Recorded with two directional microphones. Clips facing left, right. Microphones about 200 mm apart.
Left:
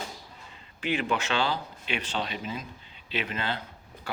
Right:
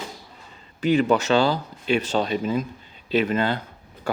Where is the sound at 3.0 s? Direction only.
45° right (ahead or behind).